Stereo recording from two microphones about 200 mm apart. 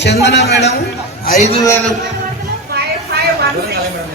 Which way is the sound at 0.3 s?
60° left (ahead or behind).